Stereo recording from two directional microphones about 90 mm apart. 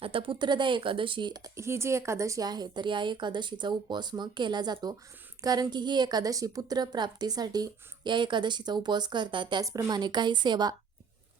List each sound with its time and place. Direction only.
0.0 s speech: 80° right
1.5 s a woman's voice: 30° right (ahead or behind); by 9.6 s 60° right (ahead or behind)
9.6 s a woman's voice: 45° right (ahead or behind)